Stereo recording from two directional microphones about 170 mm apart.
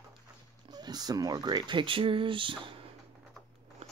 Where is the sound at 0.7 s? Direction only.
25° right (ahead or behind).